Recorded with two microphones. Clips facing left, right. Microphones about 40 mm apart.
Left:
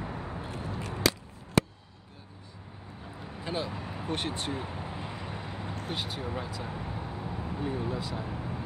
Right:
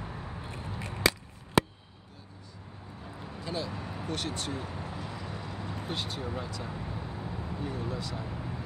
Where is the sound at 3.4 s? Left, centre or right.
Left.